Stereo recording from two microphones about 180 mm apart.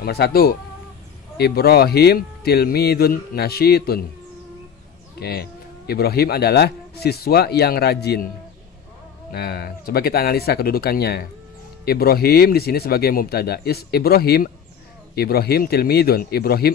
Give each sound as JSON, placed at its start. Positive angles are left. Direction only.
{"t": 0.0, "sound": "speech", "side_deg": 60}
{"t": 5.2, "sound": "speech", "side_deg": 60}
{"t": 9.3, "sound": "speech", "side_deg": 60}